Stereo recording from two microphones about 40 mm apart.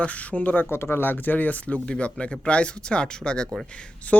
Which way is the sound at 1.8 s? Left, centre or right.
Left.